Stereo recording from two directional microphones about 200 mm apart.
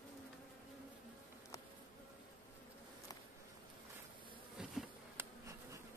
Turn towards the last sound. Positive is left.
turn(degrees=-15)  # may be behind; listen again after turning